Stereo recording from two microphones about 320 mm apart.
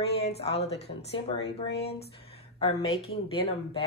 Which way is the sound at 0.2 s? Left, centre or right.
Centre.